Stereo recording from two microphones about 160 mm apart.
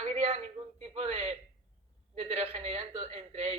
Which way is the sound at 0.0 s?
45° right (ahead or behind).